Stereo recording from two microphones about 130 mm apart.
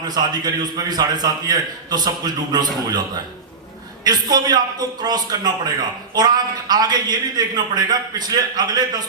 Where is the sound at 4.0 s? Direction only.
30° right (ahead or behind).